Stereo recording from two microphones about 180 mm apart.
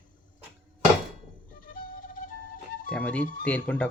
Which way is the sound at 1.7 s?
50° left (ahead or behind).